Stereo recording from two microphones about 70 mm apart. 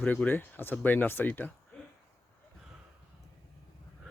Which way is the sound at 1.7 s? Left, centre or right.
Left.